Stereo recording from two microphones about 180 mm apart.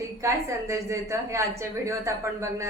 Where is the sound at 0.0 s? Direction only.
15° right (ahead or behind).